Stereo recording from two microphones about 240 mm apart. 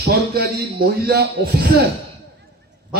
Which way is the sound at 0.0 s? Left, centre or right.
Right.